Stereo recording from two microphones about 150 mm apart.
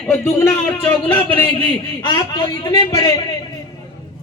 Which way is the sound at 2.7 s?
20° left (ahead or behind).